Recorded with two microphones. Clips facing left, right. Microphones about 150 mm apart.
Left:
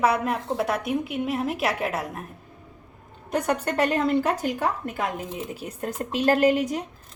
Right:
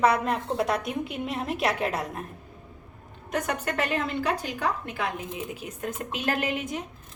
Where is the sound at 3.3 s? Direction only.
30° left (ahead or behind).